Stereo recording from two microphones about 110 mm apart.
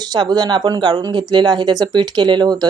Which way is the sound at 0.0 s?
40° right (ahead or behind).